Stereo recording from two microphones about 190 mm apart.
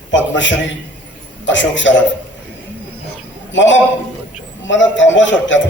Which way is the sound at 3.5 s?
80° left.